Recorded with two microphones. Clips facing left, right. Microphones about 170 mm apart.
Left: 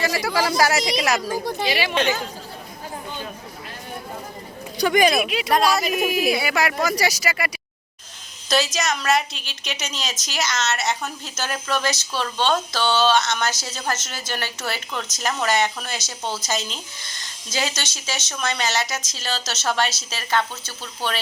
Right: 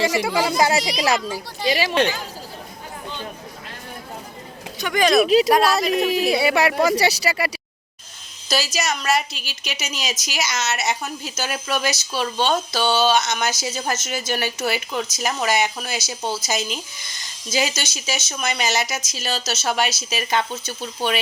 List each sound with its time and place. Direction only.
0.1 s a woman's voice: 20° right (ahead or behind)
1.3 s speech: 50° left (ahead or behind)
1.6 s speech: 40° right (ahead or behind)
4.8 s speech: 35° left (ahead or behind)
5.5 s speech: 5° right (ahead or behind)
6.3 s speech: 30° right (ahead or behind)
8.4 s a woman's voice: 5° right (ahead or behind)